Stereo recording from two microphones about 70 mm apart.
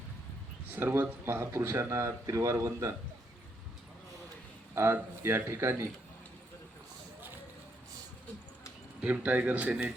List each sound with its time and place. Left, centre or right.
0.7 s speech: right
4.7 s speech: right
9.0 s speech: right